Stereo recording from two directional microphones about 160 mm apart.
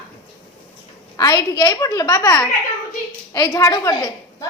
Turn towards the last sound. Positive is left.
turn(degrees=20)  # may be behind; listen again after turning